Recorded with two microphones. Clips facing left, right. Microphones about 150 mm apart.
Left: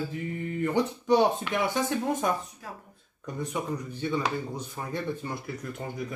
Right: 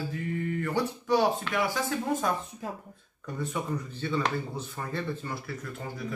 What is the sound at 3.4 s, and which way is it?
Speech, 15° left (ahead or behind).